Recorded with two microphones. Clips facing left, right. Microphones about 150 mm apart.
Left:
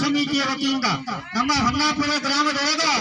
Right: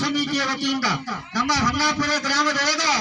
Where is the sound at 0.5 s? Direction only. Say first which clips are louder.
Left 2 dB; 20° right (ahead or behind).